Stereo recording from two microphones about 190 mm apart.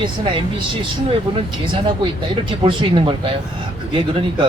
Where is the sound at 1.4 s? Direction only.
30° right (ahead or behind).